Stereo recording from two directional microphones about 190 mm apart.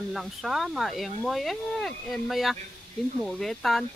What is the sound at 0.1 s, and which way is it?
Speech, centre (ahead or behind).